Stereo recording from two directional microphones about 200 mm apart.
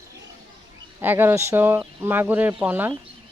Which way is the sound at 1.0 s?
10° right (ahead or behind).